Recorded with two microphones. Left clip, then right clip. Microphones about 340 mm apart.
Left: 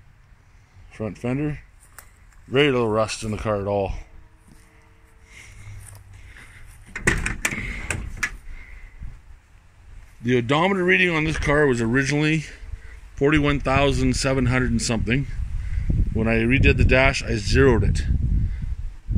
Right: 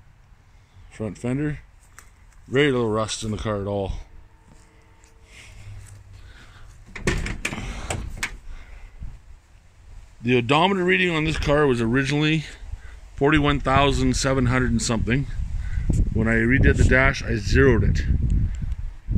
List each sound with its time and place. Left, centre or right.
0.9 s speech: centre
7.1 s a sound: centre
10.2 s speech: centre